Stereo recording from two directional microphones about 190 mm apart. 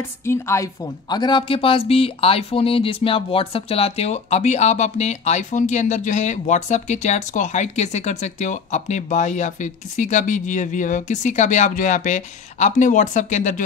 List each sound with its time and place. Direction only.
0.2 s speech: 15° left (ahead or behind); by 13.6 s 40° left (ahead or behind)